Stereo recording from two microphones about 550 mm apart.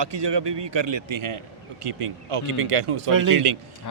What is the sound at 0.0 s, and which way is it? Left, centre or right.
A man's voice, right.